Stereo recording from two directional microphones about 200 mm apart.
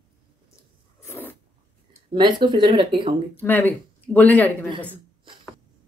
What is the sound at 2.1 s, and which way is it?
A woman's voice, 25° right (ahead or behind).